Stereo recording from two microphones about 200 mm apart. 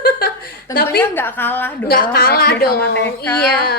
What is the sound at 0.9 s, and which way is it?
Speech, 10° left (ahead or behind).